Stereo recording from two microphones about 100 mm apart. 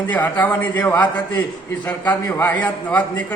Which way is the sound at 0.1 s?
15° left (ahead or behind).